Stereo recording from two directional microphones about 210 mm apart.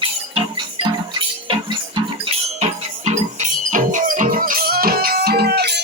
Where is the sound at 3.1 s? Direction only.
35° right (ahead or behind).